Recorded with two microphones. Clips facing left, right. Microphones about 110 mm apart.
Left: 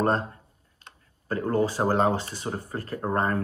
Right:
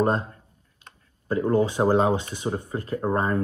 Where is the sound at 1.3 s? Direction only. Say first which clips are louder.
Right 3 dB; 20° right (ahead or behind).